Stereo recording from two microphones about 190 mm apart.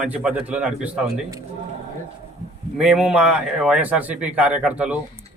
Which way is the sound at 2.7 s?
5° right (ahead or behind).